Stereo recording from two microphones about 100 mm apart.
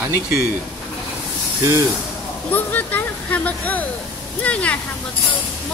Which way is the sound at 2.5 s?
20° left (ahead or behind).